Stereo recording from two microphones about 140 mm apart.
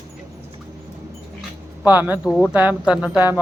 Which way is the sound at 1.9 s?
15° right (ahead or behind).